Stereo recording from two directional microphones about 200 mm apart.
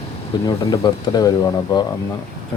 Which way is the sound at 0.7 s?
20° left (ahead or behind).